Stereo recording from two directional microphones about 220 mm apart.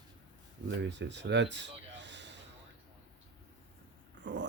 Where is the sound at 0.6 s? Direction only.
55° right (ahead or behind).